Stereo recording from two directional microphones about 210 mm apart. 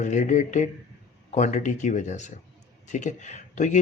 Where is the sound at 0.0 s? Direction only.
35° left (ahead or behind).